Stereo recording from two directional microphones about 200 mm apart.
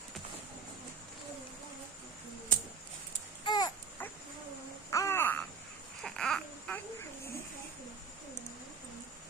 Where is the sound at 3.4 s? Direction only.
20° left (ahead or behind).